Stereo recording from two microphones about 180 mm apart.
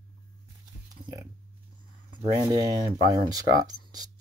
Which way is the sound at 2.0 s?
25° right (ahead or behind).